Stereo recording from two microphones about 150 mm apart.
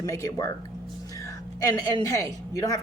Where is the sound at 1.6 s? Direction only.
25° left (ahead or behind).